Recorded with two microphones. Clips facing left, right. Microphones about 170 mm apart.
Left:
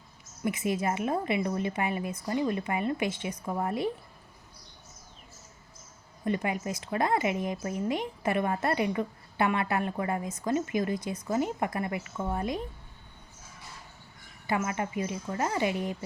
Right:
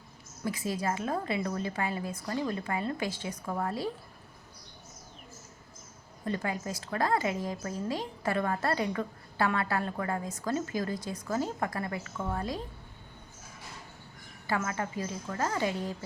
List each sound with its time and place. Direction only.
0.4 s a woman's voice: 20° left (ahead or behind)
6.2 s a woman's voice: 15° left (ahead or behind)
14.4 s a woman's voice: 15° left (ahead or behind)